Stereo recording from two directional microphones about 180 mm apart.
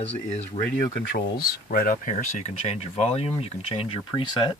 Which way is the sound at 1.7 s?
50° left (ahead or behind).